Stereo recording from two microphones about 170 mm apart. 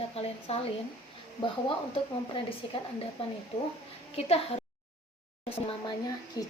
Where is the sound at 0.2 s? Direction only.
35° left (ahead or behind).